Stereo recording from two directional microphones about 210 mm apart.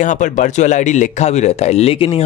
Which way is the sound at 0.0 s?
35° left (ahead or behind).